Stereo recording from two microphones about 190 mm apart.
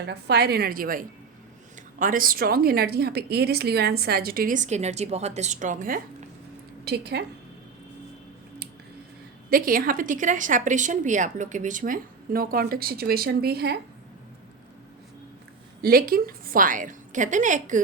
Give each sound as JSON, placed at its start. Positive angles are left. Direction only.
{"t": 0.0, "sound": "a woman's voice", "side_deg": -60}
{"t": 6.8, "sound": "a woman's voice", "side_deg": -60}
{"t": 9.5, "sound": "a woman's voice", "side_deg": -50}
{"t": 15.8, "sound": "a woman's voice", "side_deg": -50}